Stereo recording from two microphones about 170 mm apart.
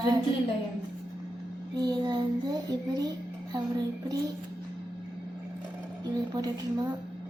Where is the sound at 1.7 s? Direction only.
25° right (ahead or behind).